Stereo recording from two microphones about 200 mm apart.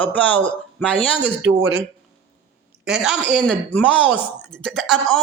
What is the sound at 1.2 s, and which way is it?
Speech, 65° right (ahead or behind).